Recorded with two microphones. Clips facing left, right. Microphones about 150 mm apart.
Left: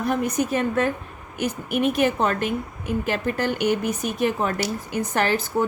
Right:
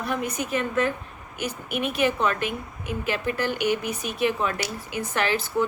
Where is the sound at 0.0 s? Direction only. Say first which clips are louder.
Left 5 dB; 45° left (ahead or behind).